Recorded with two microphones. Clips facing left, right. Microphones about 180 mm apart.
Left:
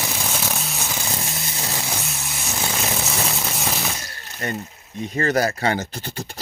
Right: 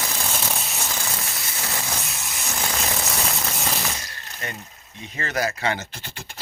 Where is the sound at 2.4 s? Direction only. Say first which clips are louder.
Left 2 dB; 5° left (ahead or behind).